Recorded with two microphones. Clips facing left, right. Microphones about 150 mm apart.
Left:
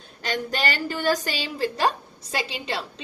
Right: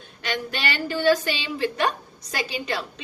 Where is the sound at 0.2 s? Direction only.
40° left (ahead or behind).